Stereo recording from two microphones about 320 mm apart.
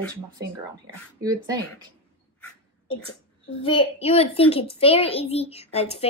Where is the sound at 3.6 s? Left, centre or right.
Centre.